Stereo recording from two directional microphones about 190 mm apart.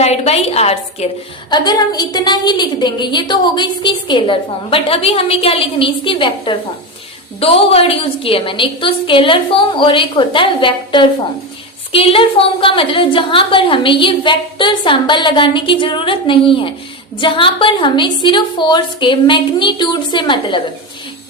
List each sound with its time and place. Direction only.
0.0 s a woman's voice: 35° left (ahead or behind)
1.5 s a woman's voice: 20° left (ahead or behind)